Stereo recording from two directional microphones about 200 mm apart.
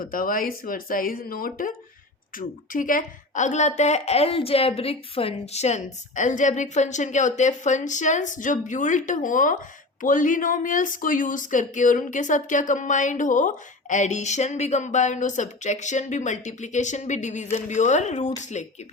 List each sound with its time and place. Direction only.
0.0 s speech: 45° left (ahead or behind)